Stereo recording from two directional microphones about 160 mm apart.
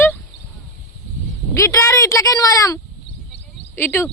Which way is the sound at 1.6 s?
20° left (ahead or behind).